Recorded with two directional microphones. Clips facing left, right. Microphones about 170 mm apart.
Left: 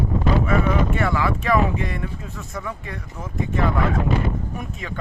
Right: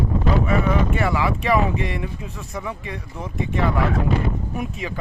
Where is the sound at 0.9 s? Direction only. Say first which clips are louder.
Even; 5° right (ahead or behind).